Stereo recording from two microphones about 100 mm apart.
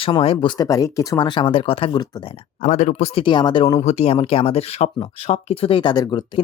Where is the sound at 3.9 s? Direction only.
85° left; by 5.9 s 60° left (ahead or behind).